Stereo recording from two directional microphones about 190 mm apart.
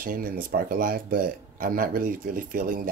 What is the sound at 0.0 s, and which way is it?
Speech, 45° right (ahead or behind).